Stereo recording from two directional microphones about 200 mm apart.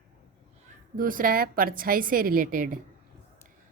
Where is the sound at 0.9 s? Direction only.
45° right (ahead or behind).